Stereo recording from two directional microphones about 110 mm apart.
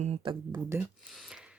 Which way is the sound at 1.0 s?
Centre (ahead or behind).